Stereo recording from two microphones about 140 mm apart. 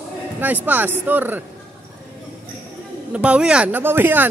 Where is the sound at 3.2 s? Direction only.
5° right (ahead or behind).